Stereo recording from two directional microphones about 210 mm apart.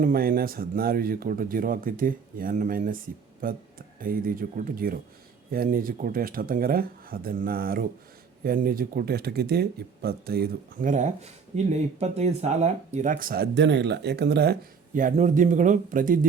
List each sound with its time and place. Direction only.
0.0 s speech: 45° right (ahead or behind)
14.9 s a man's voice: 35° right (ahead or behind)